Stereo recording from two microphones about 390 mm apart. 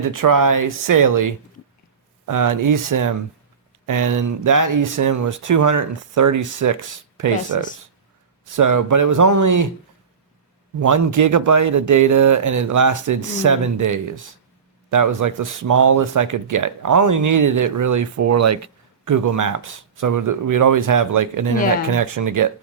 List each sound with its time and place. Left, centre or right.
0.0 s speech: right
10.8 s speech: right